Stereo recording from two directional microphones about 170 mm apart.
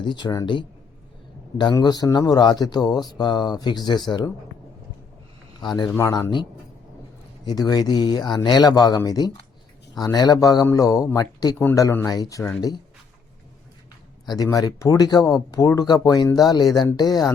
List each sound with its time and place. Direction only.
0.0 s speech: 25° left (ahead or behind)
5.5 s a man's voice: 25° left (ahead or behind)
14.3 s speech: 20° left (ahead or behind)